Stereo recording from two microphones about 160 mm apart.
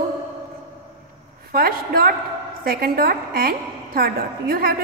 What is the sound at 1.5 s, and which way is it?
A woman's voice, 70° right (ahead or behind).